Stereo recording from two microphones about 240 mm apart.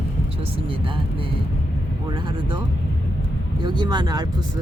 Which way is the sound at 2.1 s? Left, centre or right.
Centre.